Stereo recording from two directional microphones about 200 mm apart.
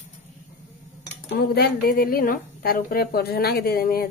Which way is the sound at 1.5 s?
50° left (ahead or behind).